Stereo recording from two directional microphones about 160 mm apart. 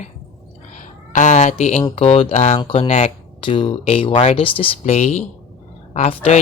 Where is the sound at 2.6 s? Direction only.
35° left (ahead or behind).